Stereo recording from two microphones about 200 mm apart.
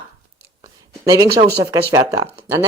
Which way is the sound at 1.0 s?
20° right (ahead or behind).